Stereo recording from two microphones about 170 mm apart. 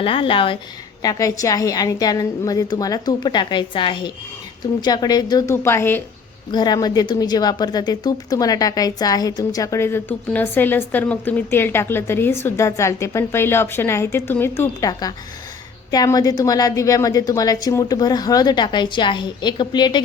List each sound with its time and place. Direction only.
0.0 s speech: 30° left (ahead or behind)
1.0 s a woman's voice: 20° left (ahead or behind)
6.5 s a woman's voice: 25° left (ahead or behind)